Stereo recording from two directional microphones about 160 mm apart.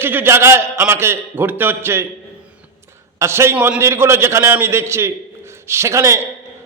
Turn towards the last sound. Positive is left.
turn(degrees=-15)  # may be behind; listen again after turning